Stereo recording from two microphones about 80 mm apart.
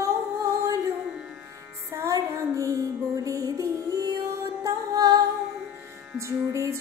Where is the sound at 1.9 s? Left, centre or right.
Right.